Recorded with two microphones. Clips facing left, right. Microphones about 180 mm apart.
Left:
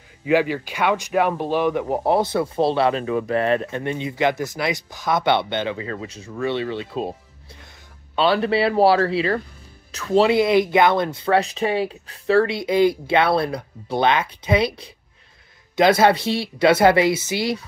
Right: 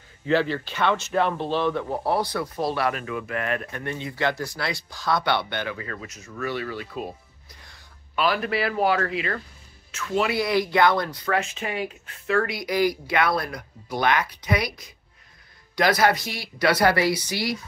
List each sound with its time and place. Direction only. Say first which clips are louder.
0.2 s speech: left 4 dB; 10° left (ahead or behind); by 7.2 s 25° left (ahead or behind)
8.2 s speech: left 6 dB; 30° left (ahead or behind)